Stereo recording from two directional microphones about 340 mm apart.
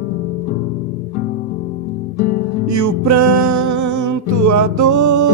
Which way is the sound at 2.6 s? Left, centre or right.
Right.